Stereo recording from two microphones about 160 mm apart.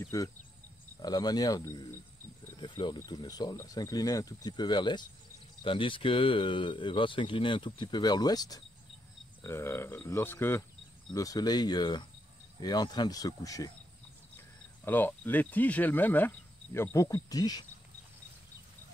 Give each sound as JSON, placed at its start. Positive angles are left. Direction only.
{"t": 0.0, "sound": "speech", "side_deg": 20}
{"t": 14.9, "sound": "speech", "side_deg": 10}